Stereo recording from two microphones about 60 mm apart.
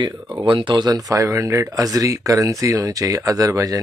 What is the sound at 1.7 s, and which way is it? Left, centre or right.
Speech, right.